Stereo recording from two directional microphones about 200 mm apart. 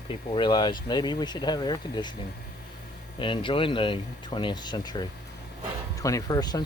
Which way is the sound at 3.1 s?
25° left (ahead or behind).